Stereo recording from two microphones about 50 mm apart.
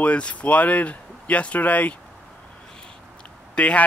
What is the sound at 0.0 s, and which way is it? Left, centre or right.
Speech, left.